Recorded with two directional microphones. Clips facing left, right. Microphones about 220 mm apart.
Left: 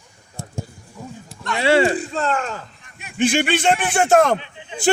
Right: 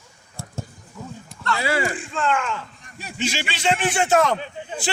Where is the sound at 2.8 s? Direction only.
40° right (ahead or behind).